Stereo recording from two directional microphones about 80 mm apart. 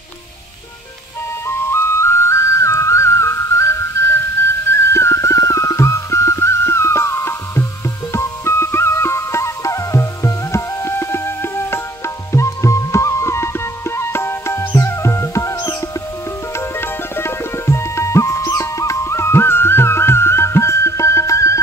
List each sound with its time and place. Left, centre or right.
1.5 s music: left